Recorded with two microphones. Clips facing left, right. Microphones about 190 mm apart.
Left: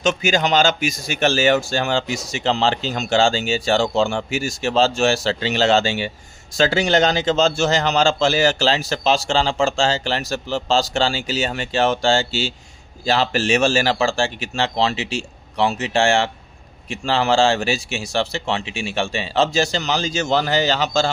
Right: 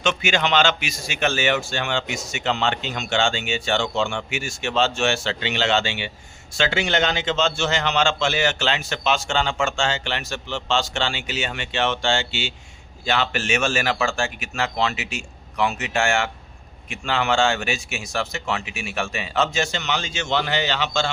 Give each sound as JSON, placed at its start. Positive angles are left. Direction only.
{"t": 0.0, "sound": "speech", "side_deg": 40}